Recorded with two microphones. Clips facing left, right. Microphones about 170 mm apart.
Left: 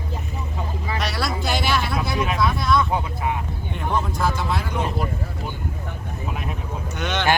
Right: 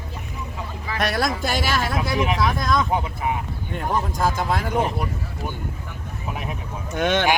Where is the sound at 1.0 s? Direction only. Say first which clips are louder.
Right 5 dB; 50° right (ahead or behind).